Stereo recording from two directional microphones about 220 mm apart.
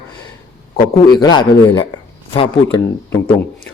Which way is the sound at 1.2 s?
20° left (ahead or behind).